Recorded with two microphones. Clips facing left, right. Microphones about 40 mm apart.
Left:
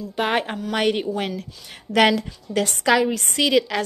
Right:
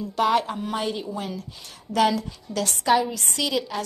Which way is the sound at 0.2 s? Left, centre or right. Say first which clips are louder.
Right 1 dB; left.